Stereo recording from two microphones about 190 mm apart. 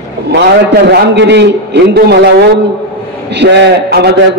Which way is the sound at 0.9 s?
65° right (ahead or behind).